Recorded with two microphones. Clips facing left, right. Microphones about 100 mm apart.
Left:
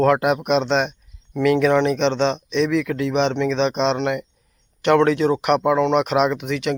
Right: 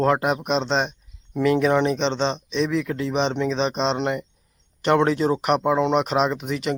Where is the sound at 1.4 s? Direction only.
30° right (ahead or behind).